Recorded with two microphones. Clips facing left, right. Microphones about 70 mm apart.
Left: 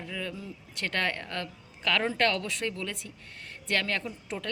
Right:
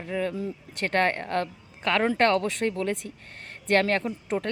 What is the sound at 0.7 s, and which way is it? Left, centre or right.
A woman's voice, right.